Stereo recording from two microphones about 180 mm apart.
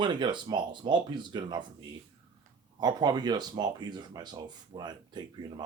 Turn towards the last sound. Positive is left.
turn(degrees=-25)  # may be behind; listen again after turning